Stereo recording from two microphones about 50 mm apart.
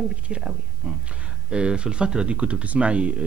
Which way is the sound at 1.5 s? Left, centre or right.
Centre.